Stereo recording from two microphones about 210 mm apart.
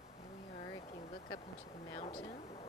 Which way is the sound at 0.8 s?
30° left (ahead or behind).